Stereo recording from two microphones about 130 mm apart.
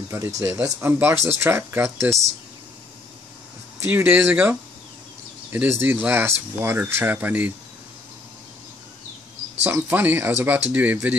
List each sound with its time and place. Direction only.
0.4 s speech: 25° right (ahead or behind)
3.8 s speech: 15° right (ahead or behind)
9.6 s speech: 15° right (ahead or behind)